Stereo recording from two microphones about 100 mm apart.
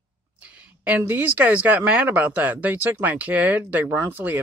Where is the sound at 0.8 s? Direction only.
15° right (ahead or behind).